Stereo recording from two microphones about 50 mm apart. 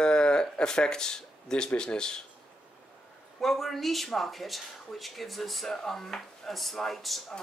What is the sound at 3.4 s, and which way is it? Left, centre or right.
Speech, centre.